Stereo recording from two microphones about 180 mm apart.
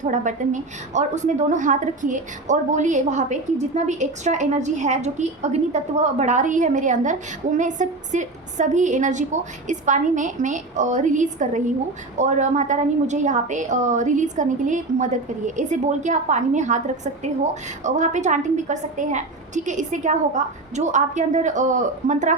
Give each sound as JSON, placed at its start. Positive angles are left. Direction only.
{"t": 0.0, "sound": "a woman's voice", "side_deg": -45}